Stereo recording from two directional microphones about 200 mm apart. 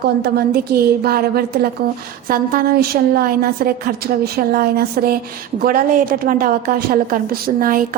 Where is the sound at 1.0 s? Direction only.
50° right (ahead or behind).